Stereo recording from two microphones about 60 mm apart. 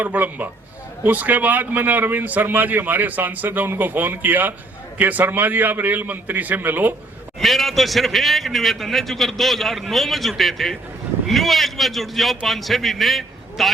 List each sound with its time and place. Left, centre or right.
0.0 s a man's voice: right
7.3 s a man's voice: centre